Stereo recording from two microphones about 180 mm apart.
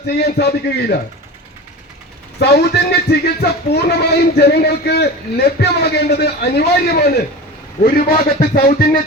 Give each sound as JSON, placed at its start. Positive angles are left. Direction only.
{"t": 0.3, "sound": "speech", "side_deg": 60}
{"t": 2.4, "sound": "a man's voice", "side_deg": 65}